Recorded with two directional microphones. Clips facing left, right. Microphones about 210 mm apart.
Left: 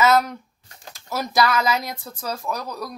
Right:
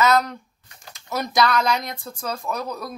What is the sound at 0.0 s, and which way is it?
Speech, 10° left (ahead or behind).